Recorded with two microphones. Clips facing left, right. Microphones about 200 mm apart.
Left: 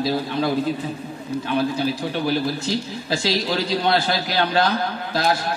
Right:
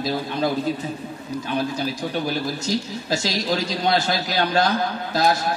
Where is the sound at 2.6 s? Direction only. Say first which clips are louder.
Even; 45° right (ahead or behind).